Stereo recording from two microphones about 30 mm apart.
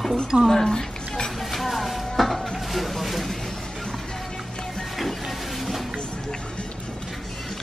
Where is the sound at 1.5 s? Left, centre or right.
Centre.